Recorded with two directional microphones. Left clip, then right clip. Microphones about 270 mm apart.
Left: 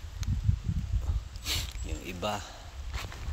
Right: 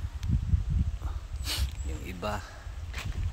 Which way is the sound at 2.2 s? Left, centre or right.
Centre.